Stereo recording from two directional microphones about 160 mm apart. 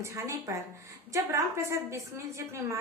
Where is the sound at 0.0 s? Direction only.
20° right (ahead or behind).